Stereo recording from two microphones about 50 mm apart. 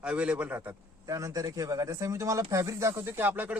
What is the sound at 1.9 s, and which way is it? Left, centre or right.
Speech, right.